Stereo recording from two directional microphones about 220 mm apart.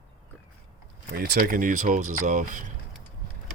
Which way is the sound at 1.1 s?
45° right (ahead or behind).